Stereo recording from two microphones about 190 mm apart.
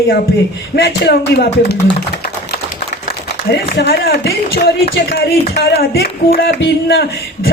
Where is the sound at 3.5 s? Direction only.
60° left (ahead or behind).